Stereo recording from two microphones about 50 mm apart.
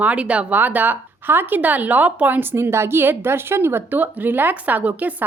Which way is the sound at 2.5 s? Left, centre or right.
Right.